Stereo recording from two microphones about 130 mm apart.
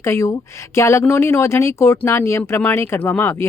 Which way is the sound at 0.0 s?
20° left (ahead or behind).